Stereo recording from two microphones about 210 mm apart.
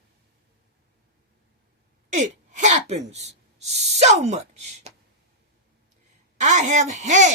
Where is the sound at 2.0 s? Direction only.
35° right (ahead or behind).